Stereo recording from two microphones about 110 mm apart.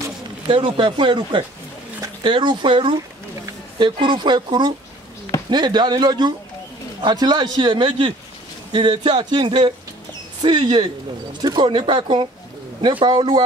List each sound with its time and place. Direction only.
0.5 s speech: 45° right (ahead or behind)